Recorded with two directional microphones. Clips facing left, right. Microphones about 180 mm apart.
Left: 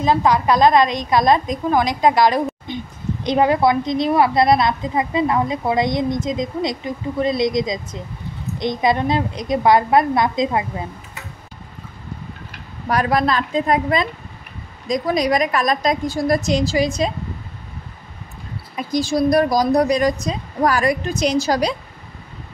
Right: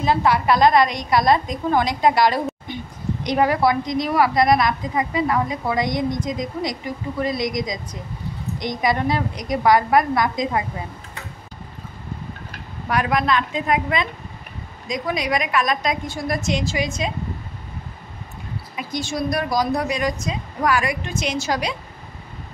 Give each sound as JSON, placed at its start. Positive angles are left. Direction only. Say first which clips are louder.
{"t": 0.0, "sound": "a woman's voice", "louder": "left 2 dB", "side_deg": 15}
{"t": 12.8, "sound": "speech", "louder": "left 3 dB", "side_deg": 35}
{"t": 18.8, "sound": "speech", "louder": "left 7 dB", "side_deg": 35}